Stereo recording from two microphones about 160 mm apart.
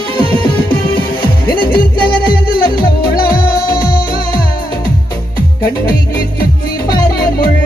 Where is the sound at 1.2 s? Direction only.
65° left (ahead or behind).